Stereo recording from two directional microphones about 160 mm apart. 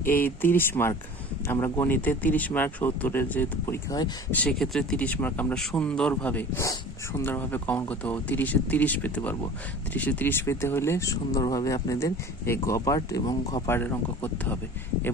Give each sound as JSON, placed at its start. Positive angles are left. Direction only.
{"t": 0.0, "sound": "speech", "side_deg": 10}
{"t": 4.4, "sound": "speech", "side_deg": 5}
{"t": 13.3, "sound": "speech", "side_deg": 35}
{"t": 13.7, "sound": "speech", "side_deg": 15}